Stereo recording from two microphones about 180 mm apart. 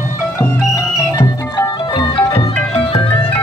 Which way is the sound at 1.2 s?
25° left (ahead or behind).